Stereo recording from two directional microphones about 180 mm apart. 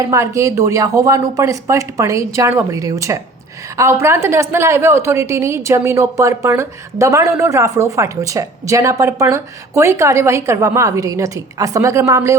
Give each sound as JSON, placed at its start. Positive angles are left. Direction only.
{"t": 0.0, "sound": "a woman's voice", "side_deg": -15}